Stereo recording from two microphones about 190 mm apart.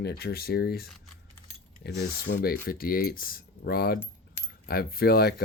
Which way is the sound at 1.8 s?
60° left (ahead or behind).